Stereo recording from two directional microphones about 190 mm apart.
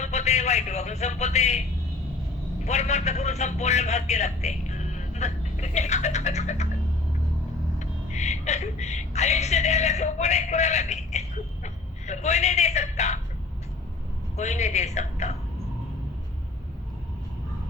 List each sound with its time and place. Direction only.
0.0 s a man's voice: 35° left (ahead or behind)
2.6 s a man's voice: 35° left (ahead or behind)
7.8 s a man's voice: 40° left (ahead or behind)
14.3 s speech: 35° left (ahead or behind)